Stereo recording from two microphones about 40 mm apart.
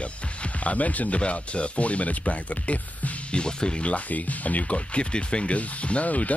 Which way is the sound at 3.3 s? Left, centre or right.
Left.